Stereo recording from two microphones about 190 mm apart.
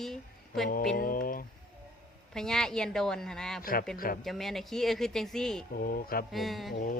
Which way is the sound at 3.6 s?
50° left (ahead or behind).